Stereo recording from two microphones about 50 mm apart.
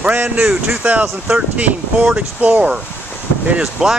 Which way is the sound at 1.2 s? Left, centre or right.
Right.